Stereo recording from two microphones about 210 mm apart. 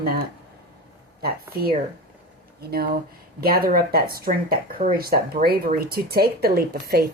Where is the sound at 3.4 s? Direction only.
45° right (ahead or behind).